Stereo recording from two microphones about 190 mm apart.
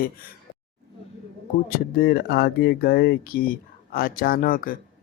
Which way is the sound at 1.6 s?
55° left (ahead or behind).